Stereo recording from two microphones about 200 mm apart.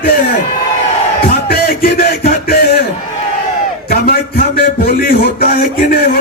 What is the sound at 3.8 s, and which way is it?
A man's voice, 50° left (ahead or behind).